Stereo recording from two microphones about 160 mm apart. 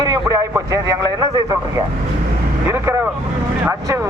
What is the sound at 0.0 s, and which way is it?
A man's voice, 20° right (ahead or behind).